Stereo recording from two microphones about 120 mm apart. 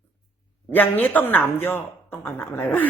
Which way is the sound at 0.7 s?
15° left (ahead or behind).